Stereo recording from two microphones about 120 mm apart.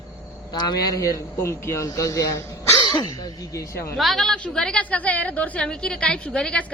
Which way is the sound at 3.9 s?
Centre (ahead or behind).